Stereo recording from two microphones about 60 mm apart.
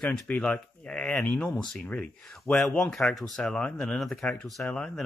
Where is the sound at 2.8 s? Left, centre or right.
Centre.